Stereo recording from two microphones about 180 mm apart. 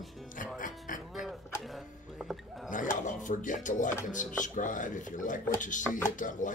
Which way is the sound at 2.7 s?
45° left (ahead or behind).